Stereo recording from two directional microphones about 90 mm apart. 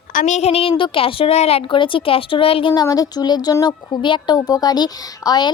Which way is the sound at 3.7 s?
60° left (ahead or behind).